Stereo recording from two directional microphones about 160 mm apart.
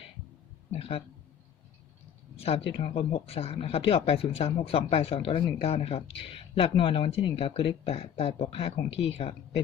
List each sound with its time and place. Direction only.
0.7 s speech: 35° left (ahead or behind)
2.3 s speech: 40° left (ahead or behind)